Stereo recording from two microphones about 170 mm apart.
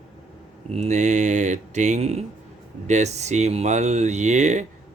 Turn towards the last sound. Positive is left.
turn(degrees=-40)  # may be behind; listen again after turning